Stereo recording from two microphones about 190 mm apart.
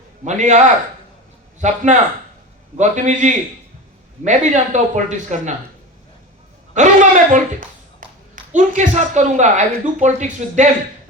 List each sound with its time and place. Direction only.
0.3 s speech: 40° right (ahead or behind)
1.6 s speech: 40° right (ahead or behind)
6.7 s speech: 40° right (ahead or behind)
8.0 s clapping: 45° right (ahead or behind)
8.5 s speech: 40° right (ahead or behind)